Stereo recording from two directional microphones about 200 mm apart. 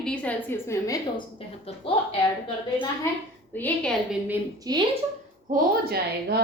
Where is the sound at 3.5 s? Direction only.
5° left (ahead or behind).